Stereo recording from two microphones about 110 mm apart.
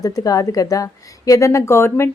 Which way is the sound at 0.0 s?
35° left (ahead or behind).